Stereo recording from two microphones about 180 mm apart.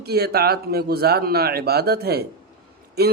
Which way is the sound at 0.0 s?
60° right (ahead or behind).